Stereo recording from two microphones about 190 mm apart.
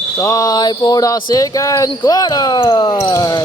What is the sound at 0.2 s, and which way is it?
Speech, 15° left (ahead or behind).